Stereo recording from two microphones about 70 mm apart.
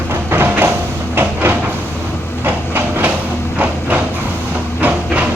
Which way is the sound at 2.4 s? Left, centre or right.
Right.